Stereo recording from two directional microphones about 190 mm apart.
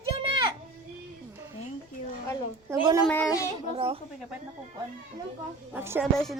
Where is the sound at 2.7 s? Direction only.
20° right (ahead or behind).